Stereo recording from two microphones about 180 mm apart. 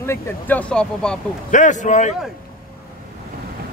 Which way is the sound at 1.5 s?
45° left (ahead or behind).